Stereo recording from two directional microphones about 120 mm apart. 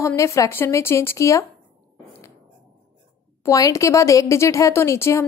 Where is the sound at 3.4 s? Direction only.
25° left (ahead or behind).